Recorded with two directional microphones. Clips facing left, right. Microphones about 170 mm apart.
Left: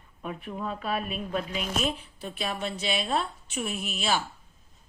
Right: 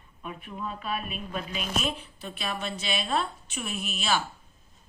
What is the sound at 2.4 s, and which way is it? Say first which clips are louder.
A woman's voice: left 2 dB; 25° left (ahead or behind).